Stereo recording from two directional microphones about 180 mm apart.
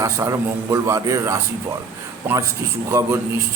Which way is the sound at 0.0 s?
20° right (ahead or behind).